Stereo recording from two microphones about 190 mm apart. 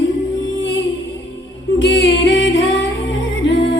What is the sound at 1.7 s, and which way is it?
Music, 75° left (ahead or behind).